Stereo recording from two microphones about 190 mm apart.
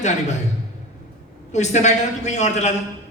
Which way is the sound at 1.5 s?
40° left (ahead or behind).